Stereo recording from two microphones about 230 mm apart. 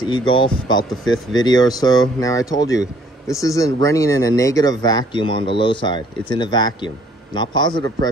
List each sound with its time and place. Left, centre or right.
0.0 s speech: centre